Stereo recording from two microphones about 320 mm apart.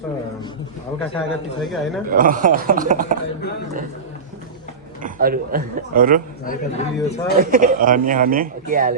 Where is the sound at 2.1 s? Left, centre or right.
Right.